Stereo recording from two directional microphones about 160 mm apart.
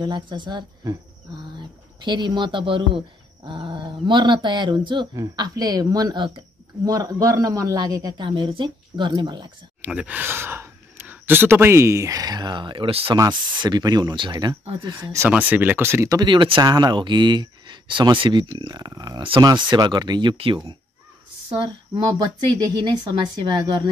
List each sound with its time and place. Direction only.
0.0 s speech: 30° right (ahead or behind)
9.8 s speech: 10° right (ahead or behind); by 23.8 s 25° right (ahead or behind)